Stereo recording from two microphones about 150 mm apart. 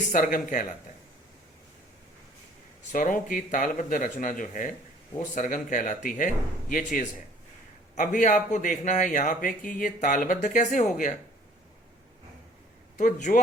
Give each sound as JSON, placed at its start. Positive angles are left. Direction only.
{"t": 0.1, "sound": "speech", "side_deg": 65}
{"t": 2.9, "sound": "speech", "side_deg": 65}
{"t": 13.0, "sound": "speech", "side_deg": 60}